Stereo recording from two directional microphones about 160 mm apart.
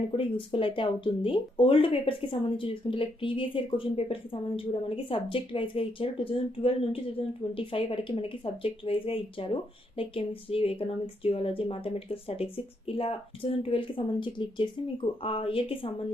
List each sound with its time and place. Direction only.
0.1 s speech: 35° left (ahead or behind)